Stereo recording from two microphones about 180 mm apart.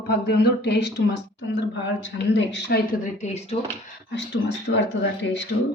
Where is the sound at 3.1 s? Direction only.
40° left (ahead or behind).